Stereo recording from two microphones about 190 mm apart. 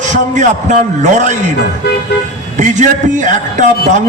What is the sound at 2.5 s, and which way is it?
A man's voice, 40° right (ahead or behind).